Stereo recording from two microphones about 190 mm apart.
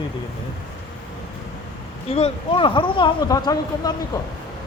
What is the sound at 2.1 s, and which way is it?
Speech, 30° left (ahead or behind).